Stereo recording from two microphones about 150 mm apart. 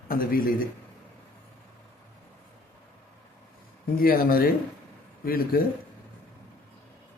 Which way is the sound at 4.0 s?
80° left.